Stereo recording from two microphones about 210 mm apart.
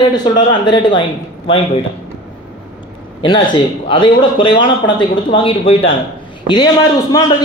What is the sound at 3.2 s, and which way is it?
A man's voice, 25° left (ahead or behind).